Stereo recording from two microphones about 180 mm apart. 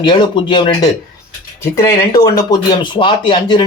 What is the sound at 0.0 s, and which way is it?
Speech, 25° left (ahead or behind).